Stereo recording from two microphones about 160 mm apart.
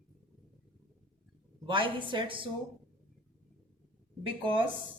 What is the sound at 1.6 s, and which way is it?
Speech, 30° right (ahead or behind).